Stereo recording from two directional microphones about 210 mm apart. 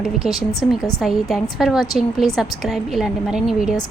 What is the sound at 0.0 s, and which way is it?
A woman's voice, centre (ahead or behind).